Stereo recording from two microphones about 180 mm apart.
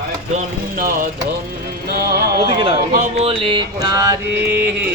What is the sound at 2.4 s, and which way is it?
Mantra, 30° right (ahead or behind).